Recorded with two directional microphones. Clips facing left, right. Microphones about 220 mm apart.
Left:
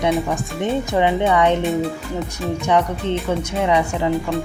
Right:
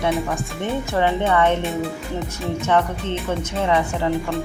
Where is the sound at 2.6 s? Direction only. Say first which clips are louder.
Left 2 dB; 15° left (ahead or behind).